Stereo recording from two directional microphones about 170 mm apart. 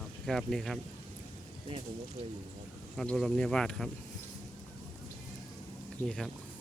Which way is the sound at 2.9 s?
5° left (ahead or behind).